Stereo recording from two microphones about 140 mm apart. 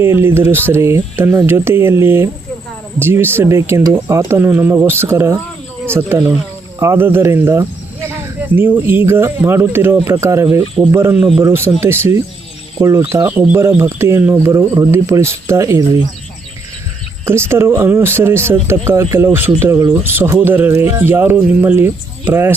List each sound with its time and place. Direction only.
0.0 s speech: 15° right (ahead or behind)
17.2 s speech: 20° right (ahead or behind)